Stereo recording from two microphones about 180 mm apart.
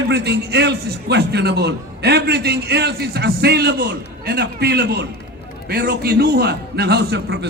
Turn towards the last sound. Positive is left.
turn(degrees=-70)  # may be behind; listen again after turning